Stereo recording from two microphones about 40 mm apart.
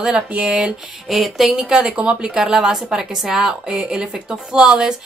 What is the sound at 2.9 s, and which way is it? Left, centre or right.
Music, centre.